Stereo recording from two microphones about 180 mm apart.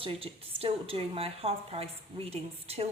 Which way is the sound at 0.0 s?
30° right (ahead or behind).